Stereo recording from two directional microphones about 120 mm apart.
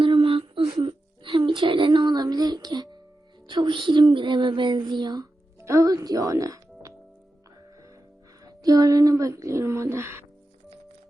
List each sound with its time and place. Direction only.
0.0 s a sound: 45° right (ahead or behind)
3.4 s music: 40° right (ahead or behind)
5.5 s speech: 25° right (ahead or behind)
8.4 s speech: 30° right (ahead or behind)